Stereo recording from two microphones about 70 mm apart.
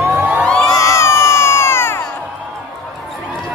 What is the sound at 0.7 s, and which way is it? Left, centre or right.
Crowd, left.